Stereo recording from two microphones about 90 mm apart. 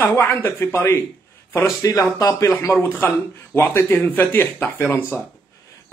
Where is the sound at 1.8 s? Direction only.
40° left (ahead or behind).